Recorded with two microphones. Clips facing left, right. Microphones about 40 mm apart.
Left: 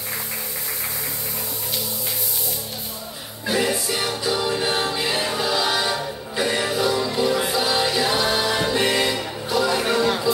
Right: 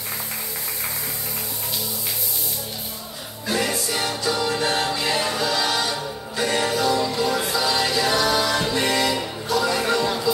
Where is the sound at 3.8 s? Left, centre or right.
Centre.